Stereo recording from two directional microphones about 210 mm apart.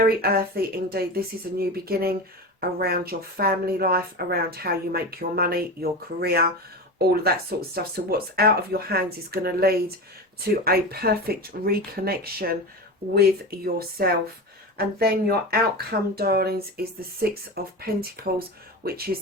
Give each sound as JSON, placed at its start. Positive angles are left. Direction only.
{"t": 0.0, "sound": "speech", "side_deg": -45}